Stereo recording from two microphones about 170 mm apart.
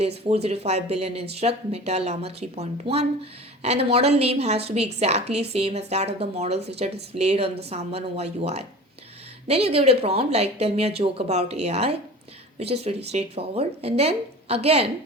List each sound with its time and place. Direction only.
0.3 s a woman's voice: 35° right (ahead or behind)